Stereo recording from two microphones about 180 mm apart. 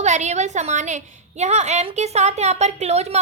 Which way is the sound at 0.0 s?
40° right (ahead or behind).